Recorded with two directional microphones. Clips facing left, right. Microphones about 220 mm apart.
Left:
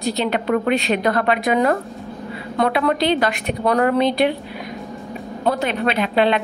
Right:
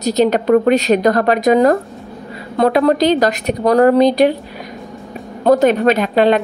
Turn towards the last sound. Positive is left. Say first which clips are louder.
# right 5 dB
turn(degrees=-45)  # may be behind; listen again after turning